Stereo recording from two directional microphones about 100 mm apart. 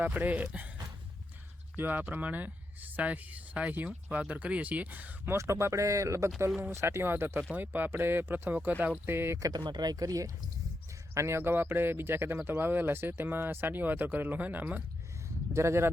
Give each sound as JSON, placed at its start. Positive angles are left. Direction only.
{"t": 0.0, "sound": "speech", "side_deg": -15}
{"t": 1.7, "sound": "speech", "side_deg": -20}
{"t": 9.5, "sound": "speech", "side_deg": -50}